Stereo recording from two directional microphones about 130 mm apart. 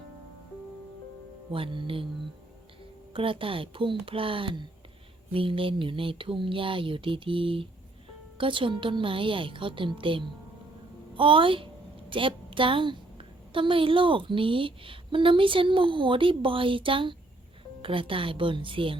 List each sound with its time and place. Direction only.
1.5 s speech: 40° right (ahead or behind)
3.1 s a woman's voice: 45° right (ahead or behind)